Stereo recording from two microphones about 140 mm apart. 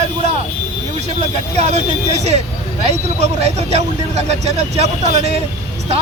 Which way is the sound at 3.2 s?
50° right (ahead or behind).